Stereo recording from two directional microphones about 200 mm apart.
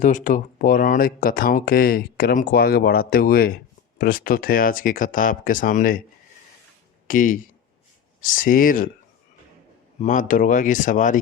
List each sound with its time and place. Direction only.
0.0 s speech: 40° left (ahead or behind)
7.1 s speech: 40° left (ahead or behind)
10.0 s speech: 40° left (ahead or behind)